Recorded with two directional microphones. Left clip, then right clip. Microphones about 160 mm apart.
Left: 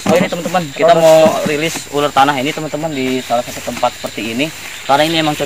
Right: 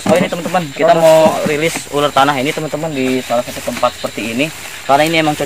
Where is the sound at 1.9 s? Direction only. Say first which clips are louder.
Left 1 dB; 35° right (ahead or behind).